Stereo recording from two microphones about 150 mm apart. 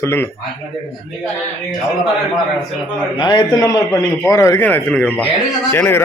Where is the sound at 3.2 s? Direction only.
30° left (ahead or behind).